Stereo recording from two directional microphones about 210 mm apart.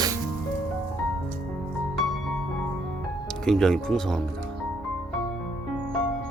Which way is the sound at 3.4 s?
Centre (ahead or behind).